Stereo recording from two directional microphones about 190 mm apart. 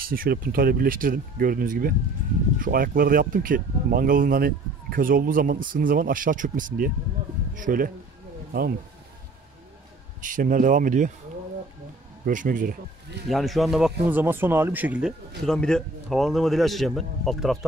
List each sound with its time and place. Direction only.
0.0 s speech: 50° right (ahead or behind)
10.2 s speech: 45° right (ahead or behind)
12.3 s speech: 45° right (ahead or behind)
13.3 s a man's voice: centre (ahead or behind)